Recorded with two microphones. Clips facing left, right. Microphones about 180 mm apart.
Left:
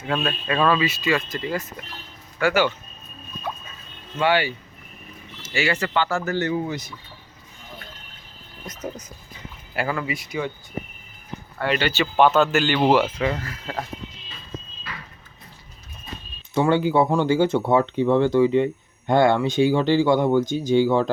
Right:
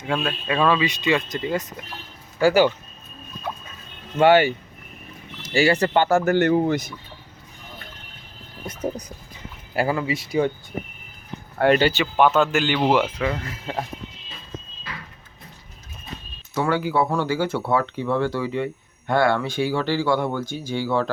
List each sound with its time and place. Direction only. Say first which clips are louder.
0.1 s speech: even; 10° right (ahead or behind)
2.4 s speech: right 4 dB; 35° right (ahead or behind)
4.2 s speech: right 6 dB; 50° right (ahead or behind)
5.4 s speech: right 5 dB; 35° right (ahead or behind)
8.6 s speech: right 5 dB; 30° right (ahead or behind)
11.5 s speech: right 6 dB; 45° right (ahead or behind)
12.1 s speech: left 3 dB; 10° right (ahead or behind)
12.8 s speech: left 2 dB; 5° left (ahead or behind)
13.5 s speech: right 2 dB; 25° right (ahead or behind)
16.6 s speech: left 3 dB; 25° left (ahead or behind)